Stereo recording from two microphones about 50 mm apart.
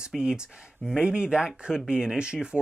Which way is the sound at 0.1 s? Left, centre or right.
Centre.